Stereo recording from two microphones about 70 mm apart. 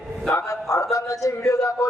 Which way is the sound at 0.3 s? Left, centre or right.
Left.